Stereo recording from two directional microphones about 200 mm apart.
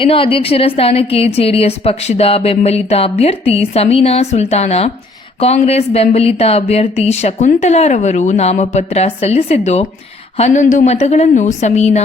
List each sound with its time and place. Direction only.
0.0 s a woman's voice: 25° left (ahead or behind)